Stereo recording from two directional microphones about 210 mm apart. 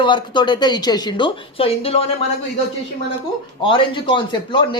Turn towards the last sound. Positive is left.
turn(degrees=25)  # may be behind; listen again after turning